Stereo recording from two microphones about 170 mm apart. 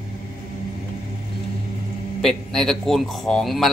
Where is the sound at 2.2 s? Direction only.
5° left (ahead or behind).